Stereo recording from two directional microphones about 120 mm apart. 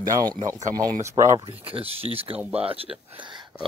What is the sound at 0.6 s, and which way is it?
Speech, 85° right.